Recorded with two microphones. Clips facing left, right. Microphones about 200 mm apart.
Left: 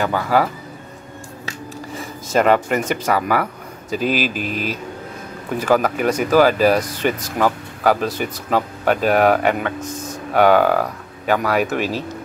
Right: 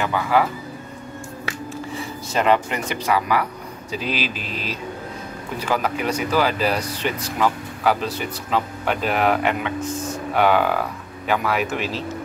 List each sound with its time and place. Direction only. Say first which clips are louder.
0.0 s speech: left 2 dB; 40° left (ahead or behind)
2.0 s speech: left 6 dB; 45° left (ahead or behind)